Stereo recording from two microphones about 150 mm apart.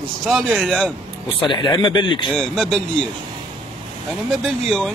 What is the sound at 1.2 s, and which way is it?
Speech, 35° left (ahead or behind).